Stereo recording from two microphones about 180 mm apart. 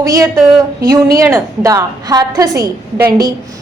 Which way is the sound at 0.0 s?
15° right (ahead or behind).